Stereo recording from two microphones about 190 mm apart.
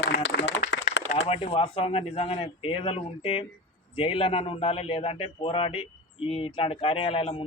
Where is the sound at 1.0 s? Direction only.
75° left (ahead or behind).